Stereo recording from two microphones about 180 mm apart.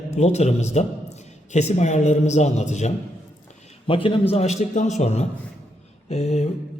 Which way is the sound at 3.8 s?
30° left (ahead or behind).